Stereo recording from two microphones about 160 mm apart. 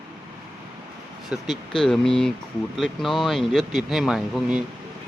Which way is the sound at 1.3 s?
Centre (ahead or behind).